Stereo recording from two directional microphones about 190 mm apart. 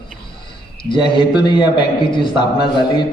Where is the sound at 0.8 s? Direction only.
25° left (ahead or behind).